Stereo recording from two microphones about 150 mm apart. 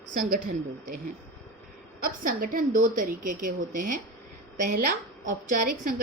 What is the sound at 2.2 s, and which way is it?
A woman's voice, 65° right (ahead or behind).